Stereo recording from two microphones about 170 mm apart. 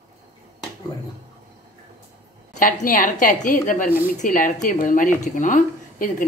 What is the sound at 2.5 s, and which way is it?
Speech, 50° left (ahead or behind).